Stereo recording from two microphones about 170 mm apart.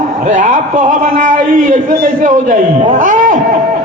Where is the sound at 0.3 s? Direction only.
50° right (ahead or behind).